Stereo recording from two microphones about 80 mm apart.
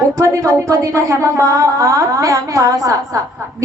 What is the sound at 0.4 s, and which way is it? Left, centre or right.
A woman's voice, right.